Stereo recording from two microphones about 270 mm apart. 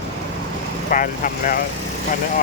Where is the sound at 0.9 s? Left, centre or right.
Left.